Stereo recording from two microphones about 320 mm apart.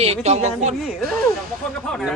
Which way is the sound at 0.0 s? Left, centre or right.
Centre.